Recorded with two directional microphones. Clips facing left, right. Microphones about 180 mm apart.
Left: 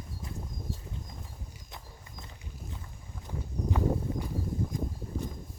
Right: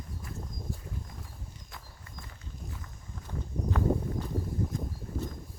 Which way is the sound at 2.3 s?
20° left (ahead or behind).